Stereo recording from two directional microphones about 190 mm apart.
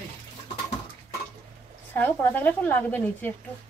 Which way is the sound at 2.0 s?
10° left (ahead or behind).